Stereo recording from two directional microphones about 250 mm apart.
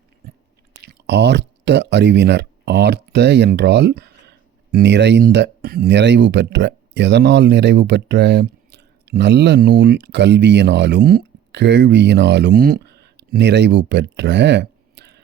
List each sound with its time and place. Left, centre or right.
1.0 s speech: right